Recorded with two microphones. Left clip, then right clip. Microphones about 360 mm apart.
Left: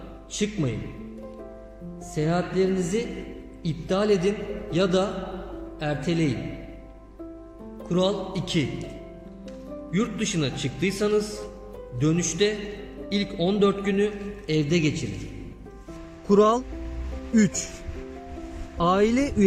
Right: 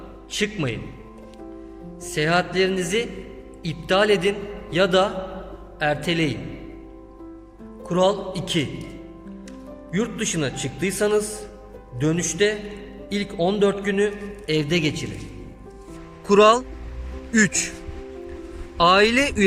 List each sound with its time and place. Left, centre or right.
0.3 s a man's voice: right
2.1 s a man's voice: right
7.9 s a man's voice: centre
9.9 s a man's voice: centre
16.2 s a man's voice: right
18.8 s a man's voice: right